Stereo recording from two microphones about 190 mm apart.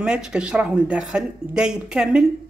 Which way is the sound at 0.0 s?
5° right (ahead or behind).